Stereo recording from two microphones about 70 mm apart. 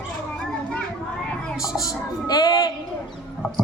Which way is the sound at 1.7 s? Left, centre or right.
Left.